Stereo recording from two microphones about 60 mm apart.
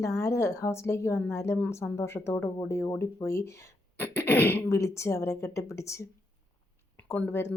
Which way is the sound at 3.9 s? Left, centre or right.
Left.